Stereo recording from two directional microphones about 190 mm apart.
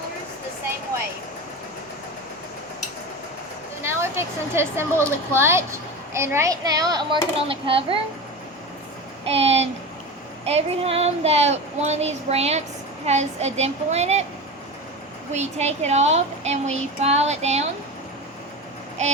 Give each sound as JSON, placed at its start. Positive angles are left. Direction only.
{"t": 3.8, "sound": "a woman's voice", "side_deg": -15}
{"t": 9.2, "sound": "a child's voice", "side_deg": -30}
{"t": 15.3, "sound": "a child's voice", "side_deg": -35}
{"t": 19.0, "sound": "a sound", "side_deg": -35}